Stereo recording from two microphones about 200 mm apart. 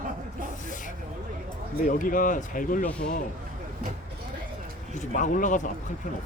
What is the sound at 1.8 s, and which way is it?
A man's voice, 40° left (ahead or behind).